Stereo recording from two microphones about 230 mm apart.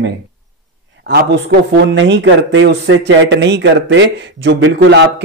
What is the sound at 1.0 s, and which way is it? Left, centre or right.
Speech, right.